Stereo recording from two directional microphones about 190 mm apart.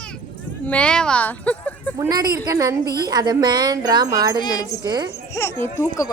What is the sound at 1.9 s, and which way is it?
A woman's voice, 20° right (ahead or behind).